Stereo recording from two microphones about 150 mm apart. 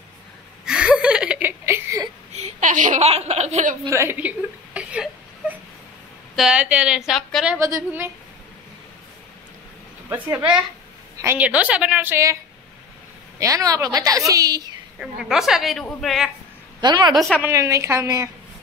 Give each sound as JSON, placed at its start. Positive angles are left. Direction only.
{"t": 0.7, "sound": "a sound", "side_deg": -5}
{"t": 2.3, "sound": "speech", "side_deg": -55}
{"t": 3.8, "sound": "whimper", "side_deg": -20}
{"t": 6.3, "sound": "a man's voice", "side_deg": -5}
{"t": 7.4, "sound": "a woman's voice", "side_deg": -20}
{"t": 11.1, "sound": "a woman's voice", "side_deg": -15}
{"t": 13.4, "sound": "a woman's voice", "side_deg": -20}
{"t": 15.0, "sound": "a man's voice", "side_deg": -5}
{"t": 16.8, "sound": "a woman's voice", "side_deg": -30}
{"t": 17.1, "sound": "a man's voice", "side_deg": 0}
{"t": 17.4, "sound": "a woman's voice", "side_deg": -20}